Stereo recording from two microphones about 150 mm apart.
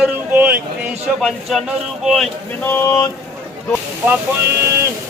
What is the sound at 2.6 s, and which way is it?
Speech, 15° left (ahead or behind).